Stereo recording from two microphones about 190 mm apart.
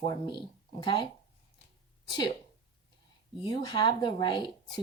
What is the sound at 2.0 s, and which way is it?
Speech, 25° left (ahead or behind).